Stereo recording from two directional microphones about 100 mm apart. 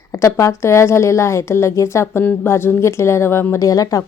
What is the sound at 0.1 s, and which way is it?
A woman's voice, 30° left (ahead or behind).